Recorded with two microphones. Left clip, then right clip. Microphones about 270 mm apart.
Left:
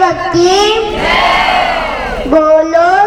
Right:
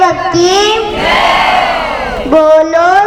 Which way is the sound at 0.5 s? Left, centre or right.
Centre.